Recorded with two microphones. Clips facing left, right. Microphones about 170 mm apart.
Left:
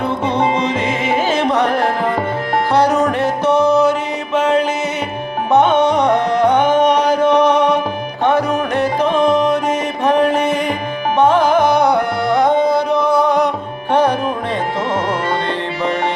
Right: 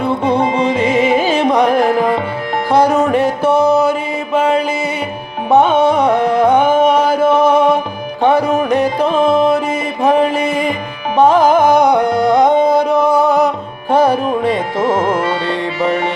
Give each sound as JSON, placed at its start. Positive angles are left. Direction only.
{"t": 0.3, "sound": "carnatic music", "side_deg": -10}
{"t": 2.7, "sound": "music", "side_deg": -10}
{"t": 5.5, "sound": "music", "side_deg": -10}
{"t": 9.1, "sound": "music", "side_deg": -30}
{"t": 10.0, "sound": "music", "side_deg": -10}